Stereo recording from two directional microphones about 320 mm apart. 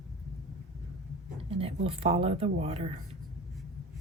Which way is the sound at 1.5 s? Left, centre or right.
Centre.